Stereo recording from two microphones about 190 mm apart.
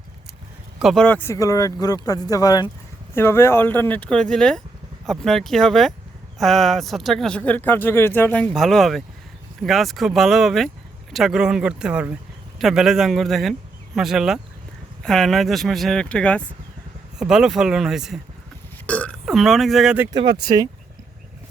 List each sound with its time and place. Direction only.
0.8 s a man's voice: centre (ahead or behind)
20.4 s speech: 20° right (ahead or behind)